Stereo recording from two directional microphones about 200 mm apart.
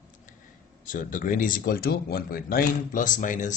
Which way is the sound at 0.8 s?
40° left (ahead or behind).